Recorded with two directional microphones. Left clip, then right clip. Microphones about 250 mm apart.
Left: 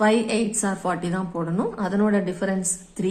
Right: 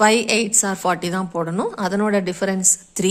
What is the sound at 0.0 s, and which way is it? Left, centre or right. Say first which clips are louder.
A woman's voice: right 5 dB; right.